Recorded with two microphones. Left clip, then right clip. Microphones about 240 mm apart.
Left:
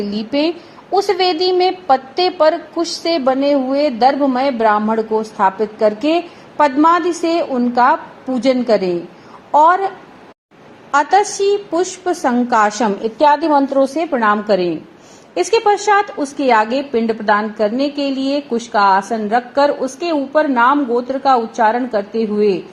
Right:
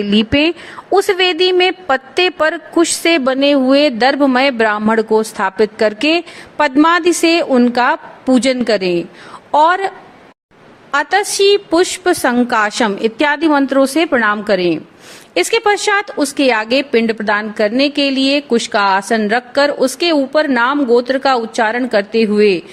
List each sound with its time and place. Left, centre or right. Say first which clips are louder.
0.1 s a woman's voice: right 6 dB; right
10.9 s a woman's voice: left 1 dB; right
13.1 s a woman's voice: left 3 dB; right
13.8 s a woman's voice: right 2 dB; right